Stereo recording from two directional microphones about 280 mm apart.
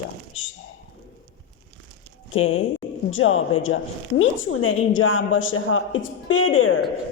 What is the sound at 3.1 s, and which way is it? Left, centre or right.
A woman's voice, left.